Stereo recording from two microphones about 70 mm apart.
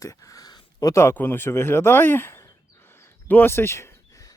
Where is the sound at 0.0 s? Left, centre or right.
Left.